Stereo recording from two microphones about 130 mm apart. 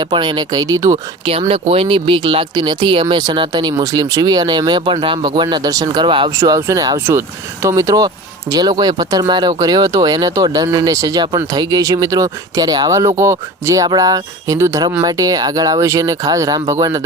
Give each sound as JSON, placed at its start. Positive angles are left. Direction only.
{"t": 0.0, "sound": "speech", "side_deg": -35}
{"t": 1.2, "sound": "speech", "side_deg": -45}
{"t": 6.4, "sound": "speech", "side_deg": -25}